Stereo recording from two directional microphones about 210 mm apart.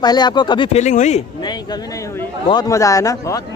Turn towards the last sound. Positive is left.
turn(degrees=15)  # may be behind; listen again after turning